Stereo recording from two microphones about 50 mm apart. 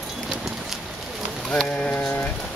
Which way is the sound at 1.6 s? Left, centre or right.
Left.